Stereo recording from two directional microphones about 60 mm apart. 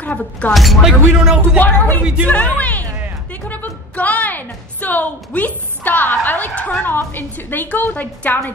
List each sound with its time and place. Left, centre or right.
0.5 s speech: centre
0.8 s speech: centre
1.6 s a woman's voice: left